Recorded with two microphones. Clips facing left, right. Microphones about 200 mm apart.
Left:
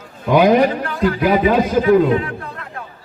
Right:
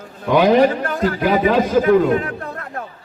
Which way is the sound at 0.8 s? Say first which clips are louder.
Left 1 dB; 45° right (ahead or behind).